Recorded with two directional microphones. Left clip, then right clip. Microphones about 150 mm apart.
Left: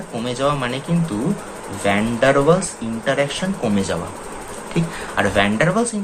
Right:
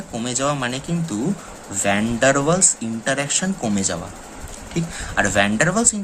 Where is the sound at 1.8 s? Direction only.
45° right (ahead or behind).